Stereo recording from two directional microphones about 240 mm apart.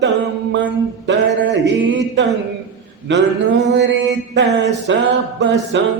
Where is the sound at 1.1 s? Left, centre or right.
Right.